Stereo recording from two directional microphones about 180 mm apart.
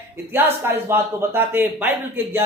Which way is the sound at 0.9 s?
10° right (ahead or behind).